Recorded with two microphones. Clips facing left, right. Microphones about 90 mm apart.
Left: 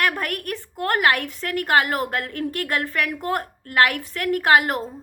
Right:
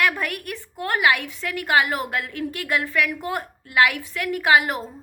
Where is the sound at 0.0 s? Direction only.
45° left (ahead or behind).